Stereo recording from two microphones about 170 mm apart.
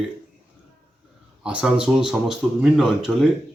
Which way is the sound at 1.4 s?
5° right (ahead or behind).